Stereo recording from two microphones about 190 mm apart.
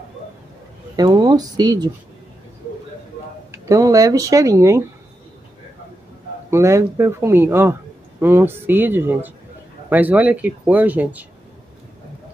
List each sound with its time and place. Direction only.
0.9 s speech: 20° right (ahead or behind)
3.5 s speech: 15° right (ahead or behind)
6.5 s speech: 15° right (ahead or behind)